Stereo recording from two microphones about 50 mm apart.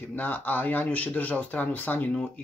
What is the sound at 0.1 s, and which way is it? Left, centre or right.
Speech, left.